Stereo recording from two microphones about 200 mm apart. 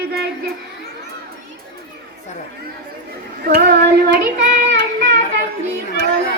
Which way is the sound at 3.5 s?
50° right (ahead or behind).